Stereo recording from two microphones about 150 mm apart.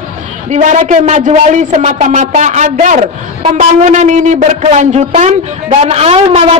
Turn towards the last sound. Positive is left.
turn(degrees=-40)  # may be behind; listen again after turning